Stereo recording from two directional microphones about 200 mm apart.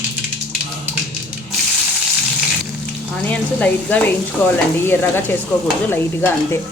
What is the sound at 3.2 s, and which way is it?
Speech, 5° left (ahead or behind).